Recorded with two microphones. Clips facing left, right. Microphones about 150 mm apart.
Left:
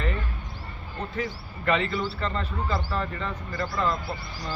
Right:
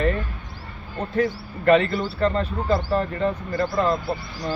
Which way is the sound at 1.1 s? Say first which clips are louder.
Right 12 dB; 45° right (ahead or behind).